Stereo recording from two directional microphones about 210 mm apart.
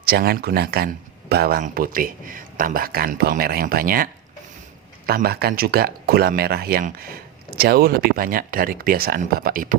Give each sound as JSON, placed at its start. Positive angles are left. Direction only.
{"t": 0.0, "sound": "speech", "side_deg": -45}